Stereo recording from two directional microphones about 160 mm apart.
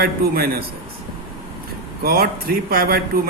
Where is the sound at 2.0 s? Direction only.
70° right (ahead or behind).